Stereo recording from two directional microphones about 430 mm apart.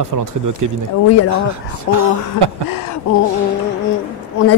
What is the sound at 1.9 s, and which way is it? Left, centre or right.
Speech, right.